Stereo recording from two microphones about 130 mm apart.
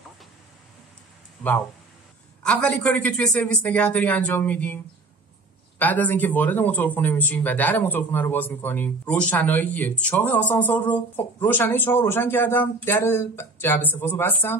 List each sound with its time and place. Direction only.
2.4 s speech: 10° left (ahead or behind)
5.8 s speech: 15° left (ahead or behind)